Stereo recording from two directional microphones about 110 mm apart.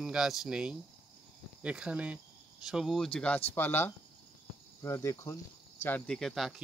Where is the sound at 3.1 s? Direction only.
10° left (ahead or behind); by 5.4 s 25° left (ahead or behind).